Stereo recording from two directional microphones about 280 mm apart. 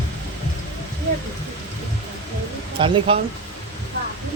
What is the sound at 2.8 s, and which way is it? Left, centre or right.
Speech, centre.